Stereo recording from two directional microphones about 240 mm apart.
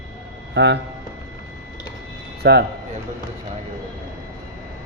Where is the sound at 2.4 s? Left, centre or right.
Right.